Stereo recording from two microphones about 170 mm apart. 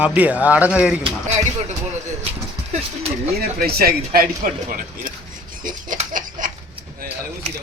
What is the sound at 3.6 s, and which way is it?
Speech, 65° right (ahead or behind).